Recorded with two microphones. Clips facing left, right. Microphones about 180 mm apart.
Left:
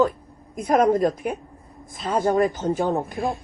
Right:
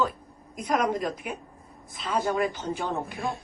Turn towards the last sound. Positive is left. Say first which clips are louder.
# left 8 dB
turn(degrees=45)  # may be behind; listen again after turning